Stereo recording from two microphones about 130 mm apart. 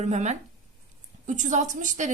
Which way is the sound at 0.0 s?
60° right (ahead or behind).